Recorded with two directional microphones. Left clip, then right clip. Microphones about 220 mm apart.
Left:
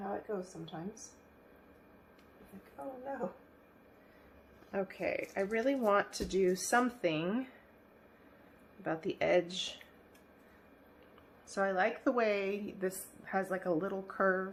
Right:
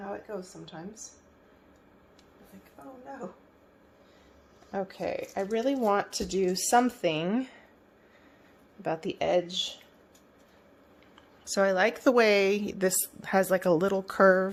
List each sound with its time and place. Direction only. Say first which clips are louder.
0.0 s a sound: right 2 dB; 25° right (ahead or behind)
4.7 s speech: right 3 dB; 25° right (ahead or behind)
8.8 s speech: right 4 dB; 35° right (ahead or behind)
11.4 s a woman's voice: right 7 dB; 45° right (ahead or behind)